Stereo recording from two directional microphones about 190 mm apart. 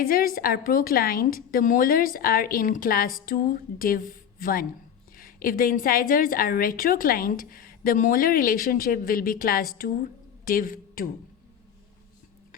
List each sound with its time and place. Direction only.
0.0 s a woman's voice: 50° left (ahead or behind)